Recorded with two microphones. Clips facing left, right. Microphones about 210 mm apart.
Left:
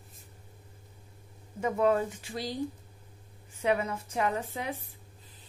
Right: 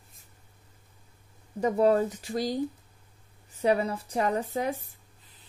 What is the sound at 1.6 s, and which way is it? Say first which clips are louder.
A woman's voice: right 4 dB; 35° right (ahead or behind).